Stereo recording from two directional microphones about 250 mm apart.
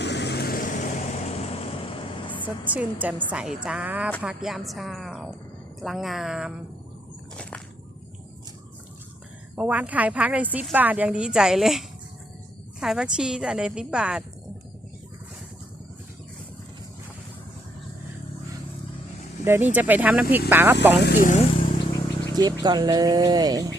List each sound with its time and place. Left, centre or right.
0.0 s vehicle: left; by 2.5 s centre
2.6 s a woman's voice: centre
9.6 s a woman's voice: centre
19.5 s speech: centre
21.0 s speech: left
21.8 s vehicle: centre
22.6 s speech: centre